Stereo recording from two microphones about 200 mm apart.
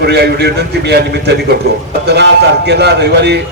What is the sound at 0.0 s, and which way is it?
A man's voice, 55° right (ahead or behind).